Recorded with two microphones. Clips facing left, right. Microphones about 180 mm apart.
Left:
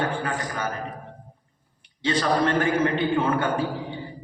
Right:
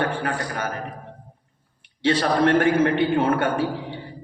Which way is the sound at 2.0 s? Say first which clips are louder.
Right 3 dB; 65° right (ahead or behind).